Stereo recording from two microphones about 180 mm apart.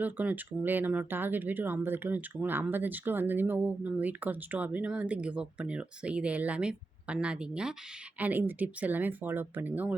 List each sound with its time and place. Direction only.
0.0 s speech: 10° right (ahead or behind)